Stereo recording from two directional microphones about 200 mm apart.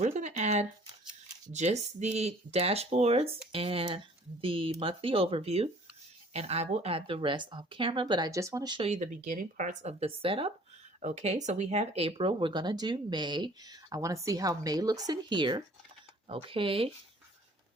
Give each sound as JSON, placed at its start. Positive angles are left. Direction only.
{"t": 0.0, "sound": "a sound", "side_deg": -35}
{"t": 1.5, "sound": "speech", "side_deg": -35}
{"t": 8.9, "sound": "speech", "side_deg": -35}